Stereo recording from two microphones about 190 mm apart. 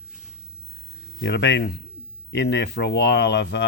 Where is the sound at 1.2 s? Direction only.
70° left (ahead or behind).